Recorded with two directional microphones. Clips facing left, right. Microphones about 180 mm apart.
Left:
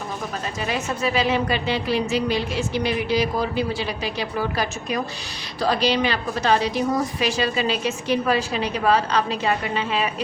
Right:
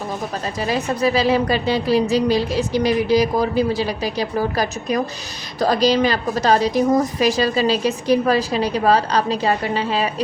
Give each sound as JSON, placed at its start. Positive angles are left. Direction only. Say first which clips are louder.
{"t": 0.6, "sound": "a woman's voice", "louder": "right 6 dB", "side_deg": -35}